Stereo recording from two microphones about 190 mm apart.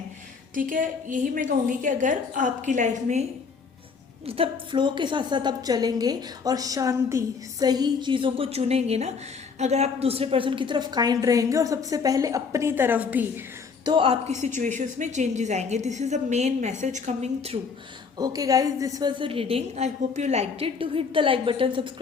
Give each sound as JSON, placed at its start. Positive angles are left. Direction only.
{"t": 0.5, "sound": "a woman's voice", "side_deg": -45}
{"t": 4.3, "sound": "a woman's voice", "side_deg": -25}
{"t": 13.8, "sound": "a woman's voice", "side_deg": -25}
{"t": 18.2, "sound": "a woman's voice", "side_deg": -20}